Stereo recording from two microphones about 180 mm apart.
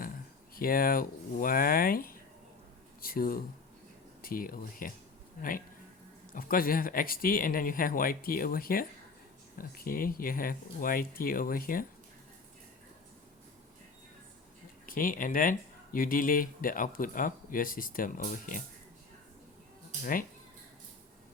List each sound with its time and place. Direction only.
0.5 s speech: 55° left (ahead or behind)
14.8 s speech: 50° left (ahead or behind)
20.0 s speech: 50° left (ahead or behind)